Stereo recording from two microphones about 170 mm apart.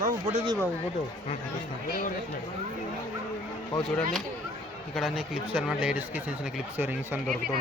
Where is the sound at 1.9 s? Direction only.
55° left (ahead or behind).